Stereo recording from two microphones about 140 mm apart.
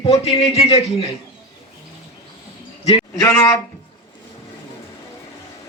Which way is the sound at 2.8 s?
50° left (ahead or behind).